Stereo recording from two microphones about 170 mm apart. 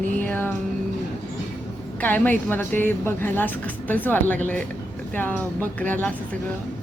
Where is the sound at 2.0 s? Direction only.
10° left (ahead or behind).